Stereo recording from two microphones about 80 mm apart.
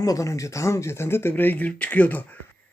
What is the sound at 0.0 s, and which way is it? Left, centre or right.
Speech, left.